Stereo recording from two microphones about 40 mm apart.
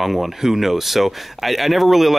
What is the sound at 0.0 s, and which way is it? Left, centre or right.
Speech, centre.